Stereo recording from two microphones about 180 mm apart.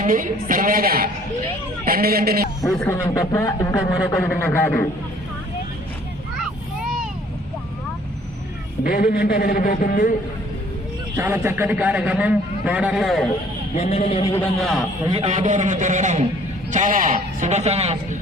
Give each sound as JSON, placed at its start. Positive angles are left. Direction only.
{"t": 0.0, "sound": "a man's voice", "side_deg": -50}
{"t": 2.7, "sound": "speech", "side_deg": 10}
{"t": 8.8, "sound": "a man's voice", "side_deg": 55}
{"t": 11.2, "sound": "a man's voice", "side_deg": -10}
{"t": 13.7, "sound": "a man's voice", "side_deg": 35}
{"t": 14.3, "sound": "a man's voice", "side_deg": 5}
{"t": 15.0, "sound": "a man's voice", "side_deg": -30}